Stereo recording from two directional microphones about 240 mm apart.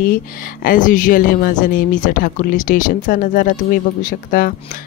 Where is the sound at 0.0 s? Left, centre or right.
Left.